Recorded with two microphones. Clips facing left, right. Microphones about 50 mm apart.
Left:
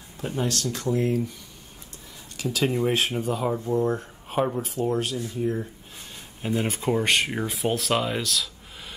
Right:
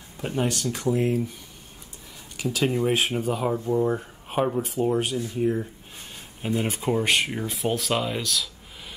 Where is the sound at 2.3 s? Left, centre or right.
Centre.